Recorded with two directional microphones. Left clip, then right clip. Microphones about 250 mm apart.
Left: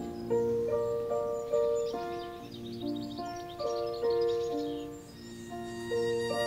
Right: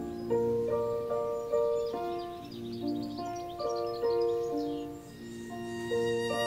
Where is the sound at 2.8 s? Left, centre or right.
Right.